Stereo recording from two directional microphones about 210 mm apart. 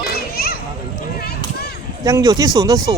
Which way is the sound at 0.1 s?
45° left (ahead or behind).